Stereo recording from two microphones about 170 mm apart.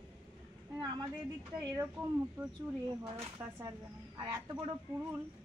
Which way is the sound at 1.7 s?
10° right (ahead or behind).